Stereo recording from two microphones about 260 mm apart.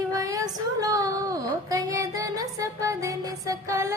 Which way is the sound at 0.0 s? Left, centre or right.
Centre.